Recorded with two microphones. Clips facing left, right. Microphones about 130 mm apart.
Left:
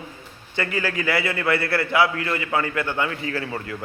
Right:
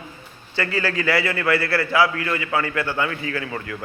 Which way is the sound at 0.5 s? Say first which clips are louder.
Right 2 dB; 15° left (ahead or behind).